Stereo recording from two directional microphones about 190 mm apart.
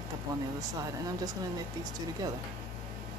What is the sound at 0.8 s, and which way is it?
Speech, 20° right (ahead or behind).